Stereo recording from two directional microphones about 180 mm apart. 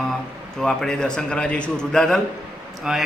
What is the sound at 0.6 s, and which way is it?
A man's voice, 5° left (ahead or behind).